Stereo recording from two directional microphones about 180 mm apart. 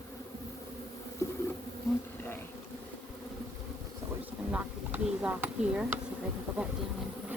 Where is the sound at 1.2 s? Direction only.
15° left (ahead or behind).